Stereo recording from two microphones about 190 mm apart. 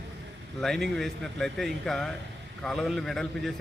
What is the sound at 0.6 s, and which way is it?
Speech, centre (ahead or behind).